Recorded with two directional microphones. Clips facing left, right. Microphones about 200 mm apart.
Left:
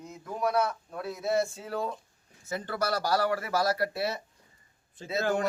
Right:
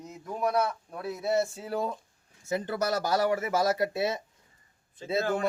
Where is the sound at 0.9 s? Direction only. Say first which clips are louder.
Right 1 dB; 10° right (ahead or behind).